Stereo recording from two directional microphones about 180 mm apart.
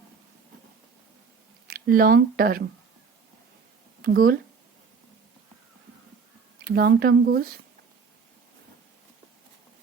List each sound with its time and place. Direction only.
1.6 s speech: 55° right (ahead or behind)
4.0 s speech: 55° right (ahead or behind)
6.7 s speech: 55° right (ahead or behind)